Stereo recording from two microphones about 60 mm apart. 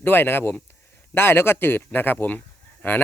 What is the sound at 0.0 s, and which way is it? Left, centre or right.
Speech, left.